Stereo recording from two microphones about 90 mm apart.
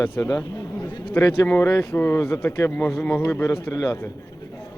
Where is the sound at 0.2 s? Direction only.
45° left (ahead or behind).